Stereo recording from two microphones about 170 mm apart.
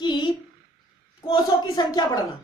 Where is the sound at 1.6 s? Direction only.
25° left (ahead or behind).